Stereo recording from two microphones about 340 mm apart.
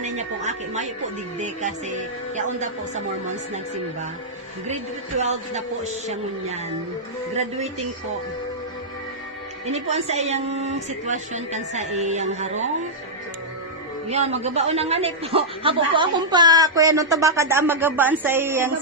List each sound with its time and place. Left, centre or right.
0.2 s a woman's voice: centre
2.3 s a woman's voice: right
5.2 s a woman's voice: centre
9.6 s a woman's voice: centre
14.1 s a man's voice: centre